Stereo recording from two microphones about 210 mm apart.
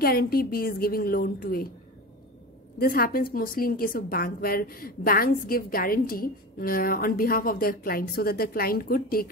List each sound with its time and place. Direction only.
0.0 s a woman's voice: 45° left (ahead or behind)
2.8 s a woman's voice: 45° left (ahead or behind)